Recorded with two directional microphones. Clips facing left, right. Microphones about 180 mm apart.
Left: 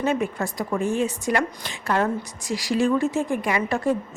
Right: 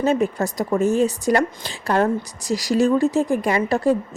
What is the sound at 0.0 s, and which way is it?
Speech, 35° right (ahead or behind).